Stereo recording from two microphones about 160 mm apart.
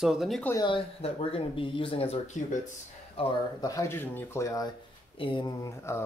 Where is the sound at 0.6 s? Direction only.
35° left (ahead or behind).